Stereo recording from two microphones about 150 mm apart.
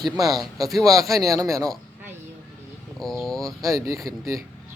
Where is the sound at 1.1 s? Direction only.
20° right (ahead or behind).